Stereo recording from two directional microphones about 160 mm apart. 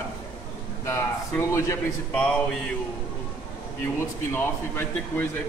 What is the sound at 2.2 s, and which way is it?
Speech, 5° left (ahead or behind).